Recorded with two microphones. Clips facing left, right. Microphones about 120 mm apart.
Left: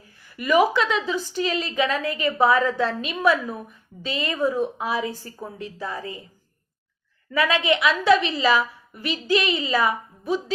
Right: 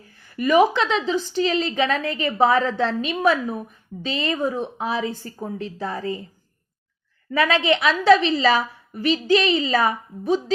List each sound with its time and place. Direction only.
0.3 s a woman's voice: 30° right (ahead or behind)
7.3 s a woman's voice: 30° right (ahead or behind)